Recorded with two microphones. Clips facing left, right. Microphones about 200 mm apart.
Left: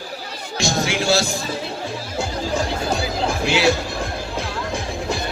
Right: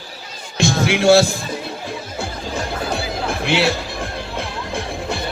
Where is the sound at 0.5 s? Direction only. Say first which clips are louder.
Right 4 dB; 60° right (ahead or behind).